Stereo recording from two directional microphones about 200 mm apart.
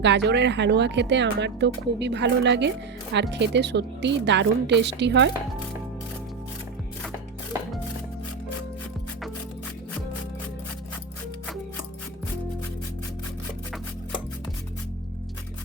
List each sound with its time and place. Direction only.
0.0 s speech: 60° right (ahead or behind)